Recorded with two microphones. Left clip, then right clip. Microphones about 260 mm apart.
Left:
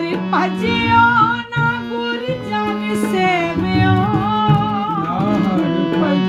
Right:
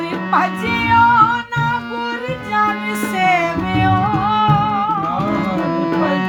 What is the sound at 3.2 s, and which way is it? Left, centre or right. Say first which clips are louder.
Music: right 2 dB; right.